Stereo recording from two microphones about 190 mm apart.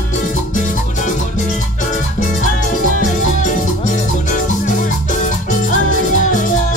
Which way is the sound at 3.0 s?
45° left (ahead or behind).